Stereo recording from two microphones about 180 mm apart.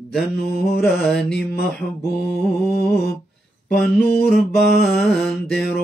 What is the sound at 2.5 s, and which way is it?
Mantra, 10° left (ahead or behind).